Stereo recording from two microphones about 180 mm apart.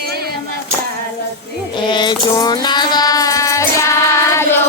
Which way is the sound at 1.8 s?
25° left (ahead or behind).